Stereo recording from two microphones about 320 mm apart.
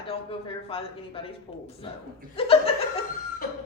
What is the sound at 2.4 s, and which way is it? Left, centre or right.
Speech, centre.